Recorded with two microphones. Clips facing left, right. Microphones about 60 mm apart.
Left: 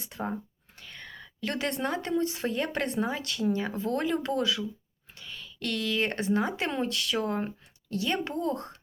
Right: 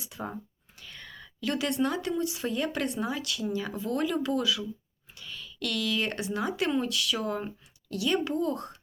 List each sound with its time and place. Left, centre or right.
0.0 s speech: left